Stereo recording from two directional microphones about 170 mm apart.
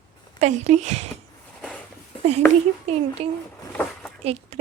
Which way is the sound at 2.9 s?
40° right (ahead or behind).